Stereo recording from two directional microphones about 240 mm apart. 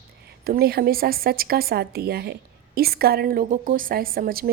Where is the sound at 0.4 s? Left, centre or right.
Right.